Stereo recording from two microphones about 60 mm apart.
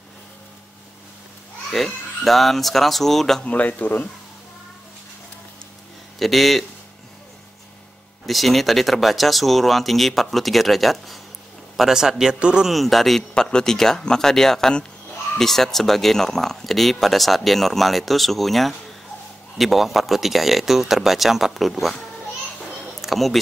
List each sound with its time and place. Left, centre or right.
1.7 s speech: centre
3.4 s speech: left
6.1 s speech: centre
8.3 s a man's voice: centre
12.6 s speech: centre